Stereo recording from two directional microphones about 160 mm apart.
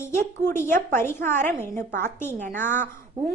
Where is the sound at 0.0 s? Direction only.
15° left (ahead or behind).